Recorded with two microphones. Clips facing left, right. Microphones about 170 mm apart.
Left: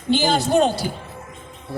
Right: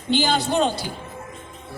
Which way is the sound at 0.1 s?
45° left (ahead or behind).